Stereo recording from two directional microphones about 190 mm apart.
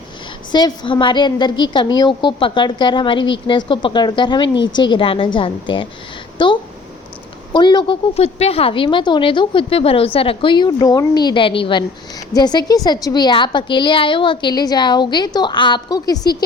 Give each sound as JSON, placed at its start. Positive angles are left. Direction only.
{"t": 0.5, "sound": "a woman's voice", "side_deg": 20}